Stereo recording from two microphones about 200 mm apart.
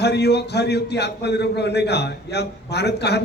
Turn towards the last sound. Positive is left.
turn(degrees=55)  # may be behind; listen again after turning